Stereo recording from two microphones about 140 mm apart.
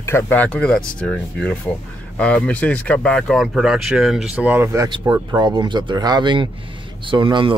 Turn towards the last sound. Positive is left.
turn(degrees=-35)  # may be behind; listen again after turning